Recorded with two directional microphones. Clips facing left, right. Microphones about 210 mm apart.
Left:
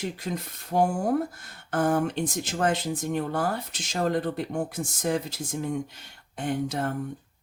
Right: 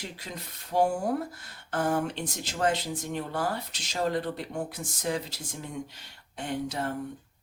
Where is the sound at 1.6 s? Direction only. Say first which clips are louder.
Left 4 dB; 50° left (ahead or behind).